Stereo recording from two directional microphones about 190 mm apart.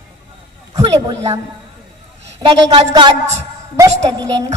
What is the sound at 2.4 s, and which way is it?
Speech, 30° right (ahead or behind).